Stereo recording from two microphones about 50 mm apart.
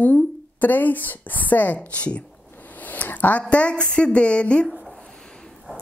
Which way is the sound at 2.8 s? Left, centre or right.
Left.